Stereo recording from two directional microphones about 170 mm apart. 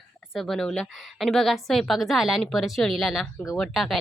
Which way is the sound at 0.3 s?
Centre (ahead or behind).